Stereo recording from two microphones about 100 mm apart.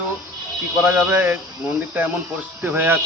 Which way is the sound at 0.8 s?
15° right (ahead or behind).